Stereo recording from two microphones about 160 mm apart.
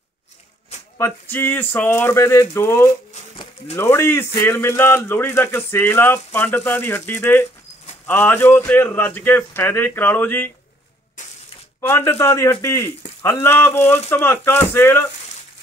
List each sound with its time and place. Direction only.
0.9 s speech: 15° left (ahead or behind)
11.9 s speech: 15° left (ahead or behind)